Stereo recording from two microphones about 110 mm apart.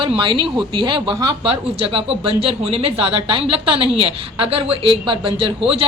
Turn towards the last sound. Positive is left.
turn(degrees=-50)  # may be behind; listen again after turning